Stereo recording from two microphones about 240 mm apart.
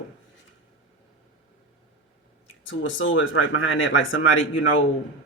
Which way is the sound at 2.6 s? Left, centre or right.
Left.